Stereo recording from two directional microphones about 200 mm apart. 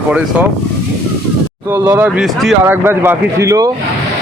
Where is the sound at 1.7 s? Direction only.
15° right (ahead or behind).